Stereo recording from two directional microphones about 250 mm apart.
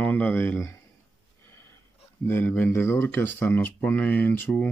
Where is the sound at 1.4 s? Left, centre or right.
Centre.